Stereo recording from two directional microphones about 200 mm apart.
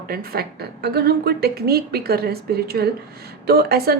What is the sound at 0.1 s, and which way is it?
A woman's voice, 50° right (ahead or behind).